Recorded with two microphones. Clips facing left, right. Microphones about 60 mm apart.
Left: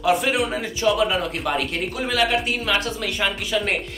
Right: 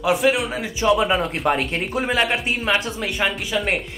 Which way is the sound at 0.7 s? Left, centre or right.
Right.